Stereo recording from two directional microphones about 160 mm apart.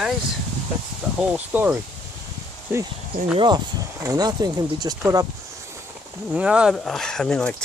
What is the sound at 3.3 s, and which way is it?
Speech, 25° right (ahead or behind).